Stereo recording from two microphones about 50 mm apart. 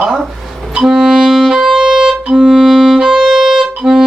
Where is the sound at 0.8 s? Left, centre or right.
Centre.